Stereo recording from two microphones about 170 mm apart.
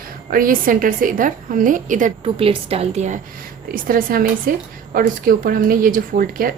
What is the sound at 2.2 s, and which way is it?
A woman's voice, 35° right (ahead or behind).